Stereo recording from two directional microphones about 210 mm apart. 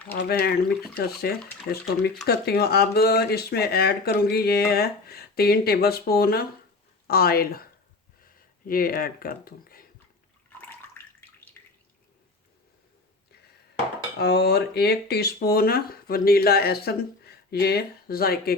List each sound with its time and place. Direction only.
0.3 s speech: 50° left (ahead or behind)
1.4 s speech: centre (ahead or behind)
2.2 s speech: 50° left (ahead or behind)
8.6 s speech: 45° left (ahead or behind)
11.6 s drip: 10° left (ahead or behind)
14.2 s speech: 50° left (ahead or behind)